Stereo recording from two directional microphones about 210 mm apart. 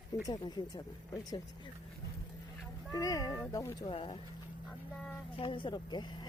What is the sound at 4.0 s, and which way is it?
Speech, 25° left (ahead or behind).